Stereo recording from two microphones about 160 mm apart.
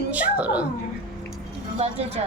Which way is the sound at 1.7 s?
40° right (ahead or behind).